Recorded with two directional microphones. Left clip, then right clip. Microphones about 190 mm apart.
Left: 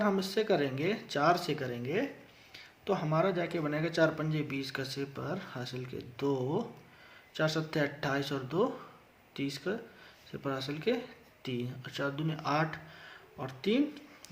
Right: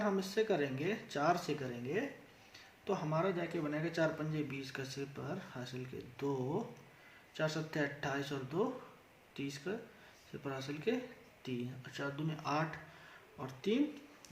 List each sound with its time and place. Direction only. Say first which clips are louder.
0.0 s speech: left 4 dB; 35° left (ahead or behind)